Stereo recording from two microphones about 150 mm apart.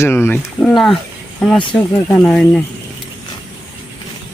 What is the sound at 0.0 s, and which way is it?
Speech, 15° left (ahead or behind).